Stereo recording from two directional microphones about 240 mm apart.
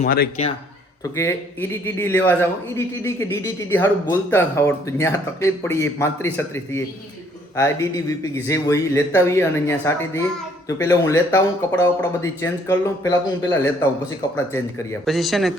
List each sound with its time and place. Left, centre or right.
0.0 s a man's voice: left
1.1 s a man's voice: centre
15.0 s a man's voice: centre